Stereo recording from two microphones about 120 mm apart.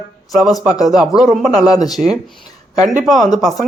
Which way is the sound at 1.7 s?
30° left (ahead or behind).